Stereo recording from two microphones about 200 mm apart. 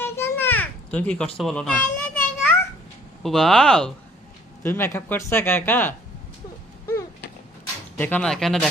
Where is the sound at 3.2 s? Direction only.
Centre (ahead or behind).